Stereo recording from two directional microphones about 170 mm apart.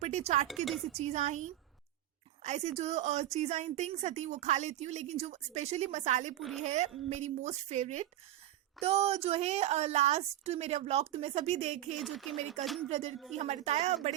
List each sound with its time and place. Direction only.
0.0 s speech: 40° right (ahead or behind)
0.4 s speech: centre (ahead or behind)
0.9 s a woman's voice: 40° right (ahead or behind)
11.9 s speech: centre (ahead or behind)
13.3 s a woman's voice: 40° right (ahead or behind)